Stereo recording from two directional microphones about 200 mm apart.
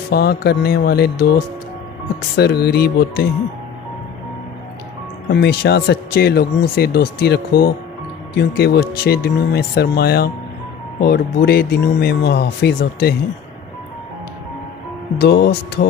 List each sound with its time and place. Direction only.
0.1 s speech: 50° left (ahead or behind)
2.3 s speech: 55° left (ahead or behind)
5.3 s speech: 55° left (ahead or behind)
15.2 s speech: 60° left (ahead or behind)